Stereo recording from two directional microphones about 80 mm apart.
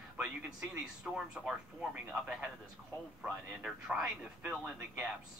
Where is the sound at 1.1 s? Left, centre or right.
Centre.